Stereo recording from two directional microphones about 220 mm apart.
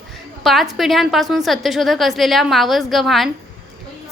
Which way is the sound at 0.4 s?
Centre (ahead or behind).